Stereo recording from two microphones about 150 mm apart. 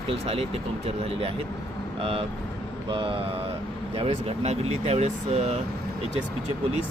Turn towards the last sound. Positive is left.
turn(degrees=-50)  # may be behind; listen again after turning